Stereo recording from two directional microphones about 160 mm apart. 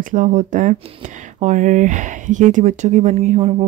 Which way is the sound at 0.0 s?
50° right (ahead or behind).